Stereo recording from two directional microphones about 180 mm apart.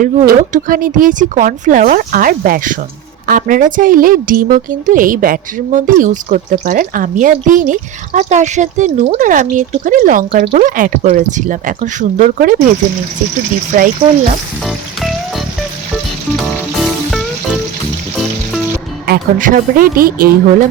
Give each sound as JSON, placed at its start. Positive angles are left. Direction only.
{"t": 0.0, "sound": "a woman's voice", "side_deg": -50}
{"t": 13.7, "sound": "a woman's voice", "side_deg": -45}
{"t": 14.6, "sound": "music", "side_deg": 0}
{"t": 19.0, "sound": "a woman's voice", "side_deg": -50}